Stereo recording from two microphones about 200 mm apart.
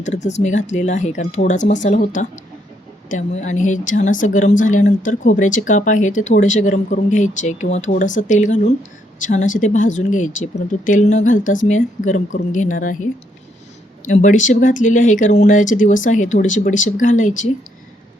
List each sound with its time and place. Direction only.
0.0 s speech: 35° left (ahead or behind)